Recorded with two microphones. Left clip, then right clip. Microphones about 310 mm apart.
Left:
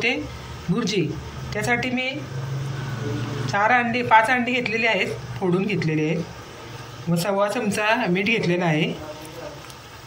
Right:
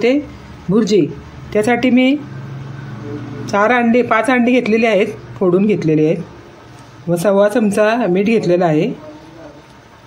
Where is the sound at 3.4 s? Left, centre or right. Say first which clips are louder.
Right 6 dB; right.